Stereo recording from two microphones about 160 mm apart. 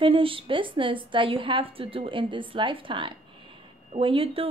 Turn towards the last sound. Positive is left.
turn(degrees=-35)  # may be behind; listen again after turning